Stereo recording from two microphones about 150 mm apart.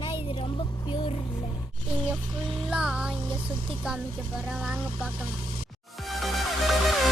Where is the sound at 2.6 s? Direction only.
5° right (ahead or behind).